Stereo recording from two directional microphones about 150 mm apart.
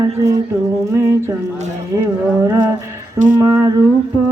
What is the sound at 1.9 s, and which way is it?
Speech, 20° right (ahead or behind).